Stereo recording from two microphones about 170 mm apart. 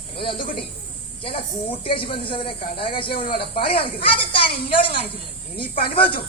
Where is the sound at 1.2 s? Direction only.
35° left (ahead or behind).